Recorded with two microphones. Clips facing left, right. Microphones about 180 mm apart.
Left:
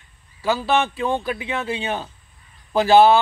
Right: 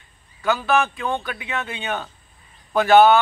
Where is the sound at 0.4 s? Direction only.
30° left (ahead or behind).